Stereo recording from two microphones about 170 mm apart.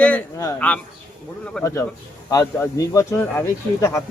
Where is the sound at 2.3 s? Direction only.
20° left (ahead or behind).